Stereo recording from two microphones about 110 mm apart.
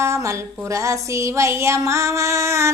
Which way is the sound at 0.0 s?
25° right (ahead or behind).